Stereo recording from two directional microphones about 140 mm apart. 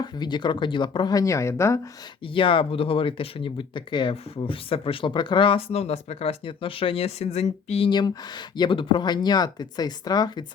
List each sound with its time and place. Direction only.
0.0 s speech: 30° left (ahead or behind)
2.2 s speech: 40° left (ahead or behind)
7.9 s speech: 30° left (ahead or behind)